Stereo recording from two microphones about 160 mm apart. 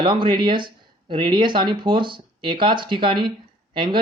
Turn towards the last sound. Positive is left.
turn(degrees=-30)  # may be behind; listen again after turning